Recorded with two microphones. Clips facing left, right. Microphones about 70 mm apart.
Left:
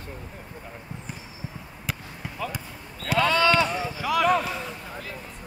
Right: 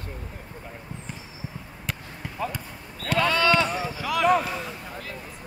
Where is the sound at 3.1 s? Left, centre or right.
Left.